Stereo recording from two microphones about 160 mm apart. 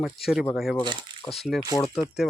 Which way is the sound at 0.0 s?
Centre (ahead or behind).